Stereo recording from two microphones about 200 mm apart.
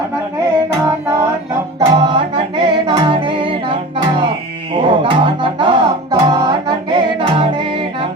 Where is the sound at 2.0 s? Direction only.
25° right (ahead or behind).